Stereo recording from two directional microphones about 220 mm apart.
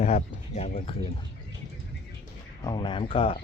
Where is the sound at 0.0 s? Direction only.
30° left (ahead or behind).